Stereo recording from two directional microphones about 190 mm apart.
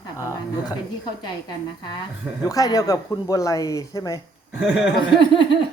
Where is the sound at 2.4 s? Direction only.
20° left (ahead or behind).